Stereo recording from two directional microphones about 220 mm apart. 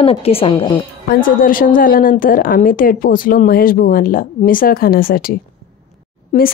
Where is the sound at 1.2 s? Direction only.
40° left (ahead or behind).